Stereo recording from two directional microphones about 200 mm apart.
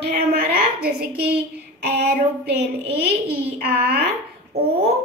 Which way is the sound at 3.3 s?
50° right (ahead or behind).